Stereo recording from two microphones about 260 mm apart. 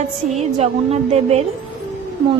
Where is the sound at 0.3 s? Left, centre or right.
Right.